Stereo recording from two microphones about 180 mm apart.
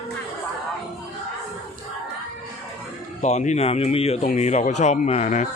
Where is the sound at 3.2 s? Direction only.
40° left (ahead or behind).